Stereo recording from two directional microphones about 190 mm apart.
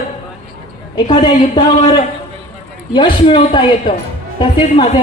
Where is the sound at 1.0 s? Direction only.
25° left (ahead or behind).